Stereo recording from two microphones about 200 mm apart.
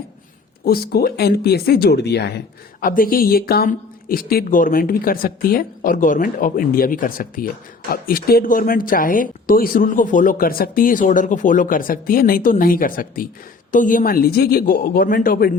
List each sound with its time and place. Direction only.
0.6 s speech: 50° left (ahead or behind)